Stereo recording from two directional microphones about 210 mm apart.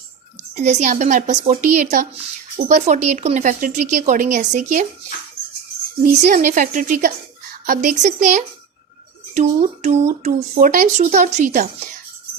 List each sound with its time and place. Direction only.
0.7 s speech: 35° right (ahead or behind)